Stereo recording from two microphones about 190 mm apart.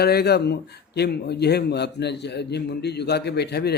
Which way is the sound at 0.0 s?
55° left (ahead or behind).